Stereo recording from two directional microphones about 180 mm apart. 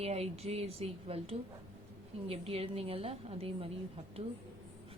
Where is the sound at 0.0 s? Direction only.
35° right (ahead or behind).